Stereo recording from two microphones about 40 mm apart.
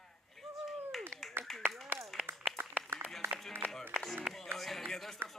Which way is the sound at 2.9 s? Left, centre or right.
Right.